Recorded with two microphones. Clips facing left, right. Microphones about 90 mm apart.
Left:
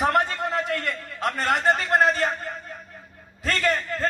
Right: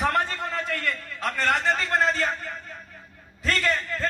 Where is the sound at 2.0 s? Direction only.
50° left (ahead or behind).